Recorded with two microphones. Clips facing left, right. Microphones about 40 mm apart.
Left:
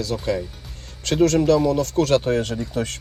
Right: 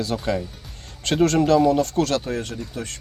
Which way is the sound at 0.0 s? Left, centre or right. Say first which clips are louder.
Even; right.